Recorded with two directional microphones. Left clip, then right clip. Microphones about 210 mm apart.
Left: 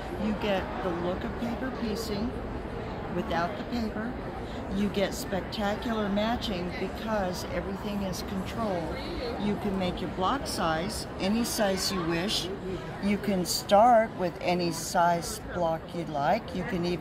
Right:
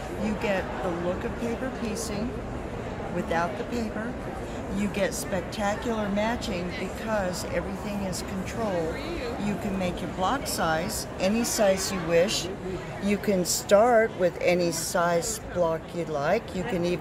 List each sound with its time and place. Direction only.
3.3 s speech: 15° right (ahead or behind)
9.8 s speech: 15° right (ahead or behind)